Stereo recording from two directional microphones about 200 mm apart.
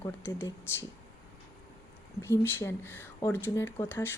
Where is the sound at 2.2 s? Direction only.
10° left (ahead or behind).